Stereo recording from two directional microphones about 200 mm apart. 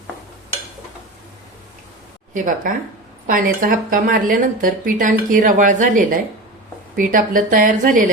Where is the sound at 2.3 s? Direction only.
40° right (ahead or behind).